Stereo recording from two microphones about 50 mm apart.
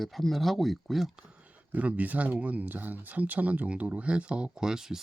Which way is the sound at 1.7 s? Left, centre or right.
Right.